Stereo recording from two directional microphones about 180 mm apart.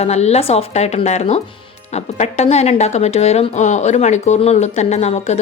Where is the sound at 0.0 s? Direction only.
35° left (ahead or behind).